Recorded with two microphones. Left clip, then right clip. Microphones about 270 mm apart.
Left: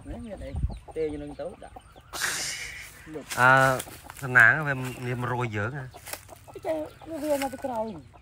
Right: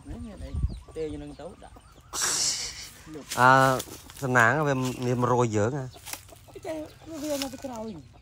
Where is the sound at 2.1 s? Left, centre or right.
Centre.